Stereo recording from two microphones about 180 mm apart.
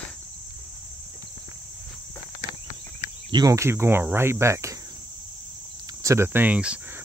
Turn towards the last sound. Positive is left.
turn(degrees=-5)  # may be behind; listen again after turning